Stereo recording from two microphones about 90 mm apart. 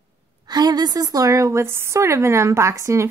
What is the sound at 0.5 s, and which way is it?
Speech, 50° right (ahead or behind).